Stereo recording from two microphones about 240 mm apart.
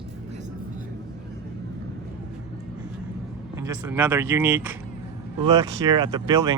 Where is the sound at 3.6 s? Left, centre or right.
Centre.